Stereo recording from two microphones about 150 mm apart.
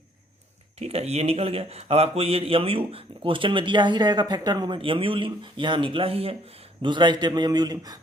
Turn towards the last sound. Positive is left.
turn(degrees=-25)  # may be behind; listen again after turning